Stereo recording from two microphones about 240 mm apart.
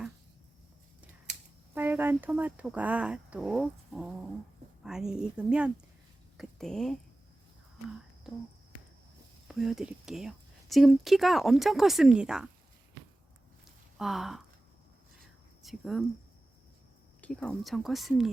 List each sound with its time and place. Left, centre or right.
1.7 s speech: centre
8.3 s speech: centre
9.5 s speech: centre
14.0 s speech: centre
15.6 s speech: centre
17.2 s speech: centre